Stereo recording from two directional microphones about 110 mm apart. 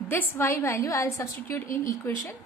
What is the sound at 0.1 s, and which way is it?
A woman's voice, 20° left (ahead or behind).